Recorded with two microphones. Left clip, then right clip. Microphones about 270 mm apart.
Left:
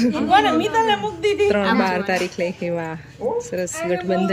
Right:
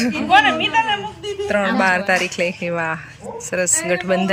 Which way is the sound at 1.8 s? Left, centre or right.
Centre.